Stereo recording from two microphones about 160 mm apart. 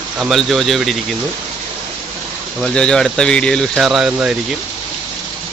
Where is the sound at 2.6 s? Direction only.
5° left (ahead or behind).